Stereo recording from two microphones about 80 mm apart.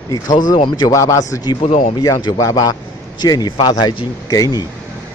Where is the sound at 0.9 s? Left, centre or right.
Left.